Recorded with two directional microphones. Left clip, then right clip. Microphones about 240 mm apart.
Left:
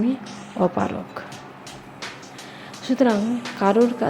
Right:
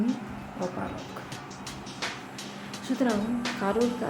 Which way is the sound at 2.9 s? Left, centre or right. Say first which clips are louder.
Left 8 dB; left.